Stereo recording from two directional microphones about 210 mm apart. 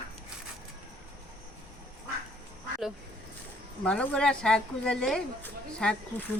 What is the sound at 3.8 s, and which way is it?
A woman's voice, 5° left (ahead or behind).